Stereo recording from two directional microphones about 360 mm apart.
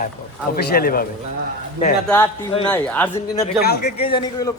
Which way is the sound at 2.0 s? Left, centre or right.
Centre.